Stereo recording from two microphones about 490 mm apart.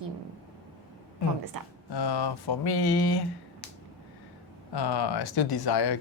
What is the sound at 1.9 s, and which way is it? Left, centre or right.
Speech, left.